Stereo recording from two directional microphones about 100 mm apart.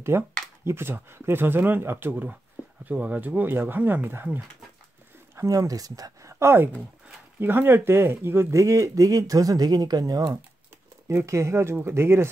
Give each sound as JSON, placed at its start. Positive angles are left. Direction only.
{"t": 0.1, "sound": "speech", "side_deg": -25}
{"t": 11.1, "sound": "speech", "side_deg": -30}